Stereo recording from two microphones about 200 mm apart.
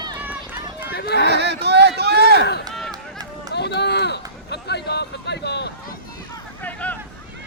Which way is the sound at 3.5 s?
55° left (ahead or behind).